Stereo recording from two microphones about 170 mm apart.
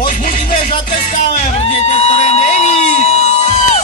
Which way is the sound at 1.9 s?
40° left (ahead or behind).